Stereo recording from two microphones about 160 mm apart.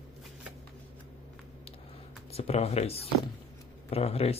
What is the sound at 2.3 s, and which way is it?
Speech, 40° left (ahead or behind).